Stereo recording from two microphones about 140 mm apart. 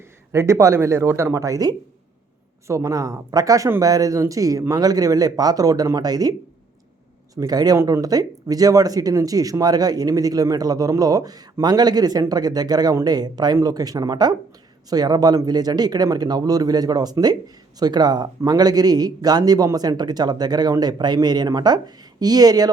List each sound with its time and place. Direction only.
0.3 s speech: 20° right (ahead or behind)
7.3 s speech: 25° right (ahead or behind)